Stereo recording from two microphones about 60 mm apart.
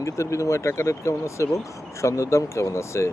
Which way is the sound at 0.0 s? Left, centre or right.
Left.